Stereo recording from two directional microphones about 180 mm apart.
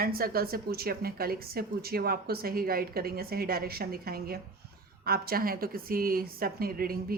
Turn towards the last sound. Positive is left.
turn(degrees=-55)  # may be behind; listen again after turning